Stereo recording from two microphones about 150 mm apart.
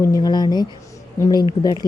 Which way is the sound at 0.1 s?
25° left (ahead or behind).